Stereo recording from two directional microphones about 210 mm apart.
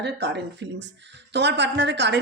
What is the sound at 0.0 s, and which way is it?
Speech, 55° right (ahead or behind).